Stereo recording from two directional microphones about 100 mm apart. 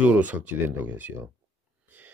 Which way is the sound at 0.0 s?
15° right (ahead or behind).